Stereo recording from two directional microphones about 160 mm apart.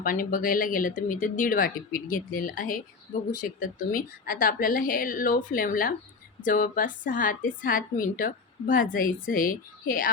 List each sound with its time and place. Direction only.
0.0 s a woman's voice: 60° left (ahead or behind)